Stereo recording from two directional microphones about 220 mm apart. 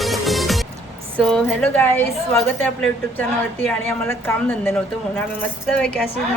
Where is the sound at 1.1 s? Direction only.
Centre (ahead or behind).